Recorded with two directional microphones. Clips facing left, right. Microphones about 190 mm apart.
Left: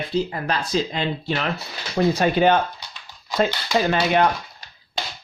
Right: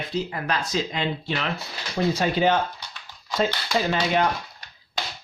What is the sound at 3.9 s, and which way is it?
Speech, 65° left (ahead or behind).